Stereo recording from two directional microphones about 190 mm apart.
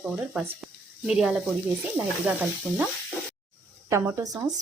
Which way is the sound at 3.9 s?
15° right (ahead or behind).